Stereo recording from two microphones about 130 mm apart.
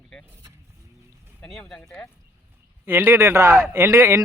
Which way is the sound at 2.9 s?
15° right (ahead or behind).